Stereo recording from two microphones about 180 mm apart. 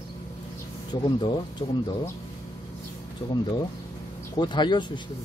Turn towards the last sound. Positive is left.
turn(degrees=25)  # may be behind; listen again after turning